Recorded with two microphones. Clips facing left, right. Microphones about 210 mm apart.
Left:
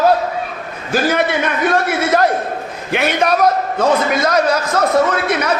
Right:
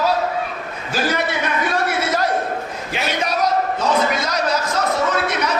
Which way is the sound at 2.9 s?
60° left (ahead or behind).